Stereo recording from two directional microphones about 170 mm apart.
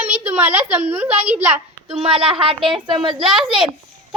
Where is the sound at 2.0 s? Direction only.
35° right (ahead or behind).